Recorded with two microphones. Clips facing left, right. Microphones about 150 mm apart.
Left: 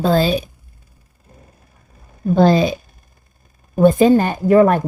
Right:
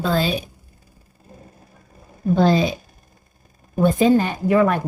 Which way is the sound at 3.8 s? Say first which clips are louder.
Left 4 dB; 50° left (ahead or behind).